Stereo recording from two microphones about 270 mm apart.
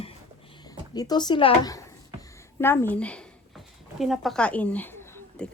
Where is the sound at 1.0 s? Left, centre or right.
Centre.